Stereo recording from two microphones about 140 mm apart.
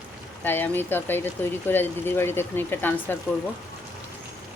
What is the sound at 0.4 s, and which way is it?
Speech, 15° left (ahead or behind).